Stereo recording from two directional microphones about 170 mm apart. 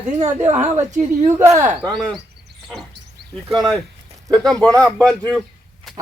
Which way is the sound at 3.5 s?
Centre (ahead or behind).